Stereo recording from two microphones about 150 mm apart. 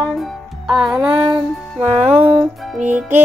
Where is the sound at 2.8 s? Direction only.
15° right (ahead or behind).